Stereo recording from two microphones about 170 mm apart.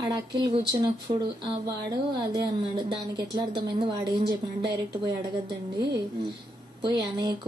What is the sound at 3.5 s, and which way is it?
Speech, 65° right (ahead or behind).